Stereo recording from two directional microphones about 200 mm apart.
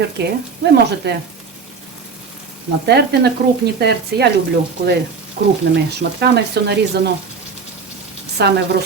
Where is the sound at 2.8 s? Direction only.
55° right (ahead or behind).